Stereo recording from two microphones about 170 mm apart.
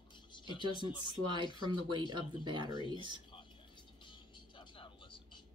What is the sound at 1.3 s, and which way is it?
Speech, 25° right (ahead or behind).